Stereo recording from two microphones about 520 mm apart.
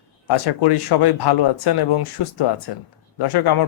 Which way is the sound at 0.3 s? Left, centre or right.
Left.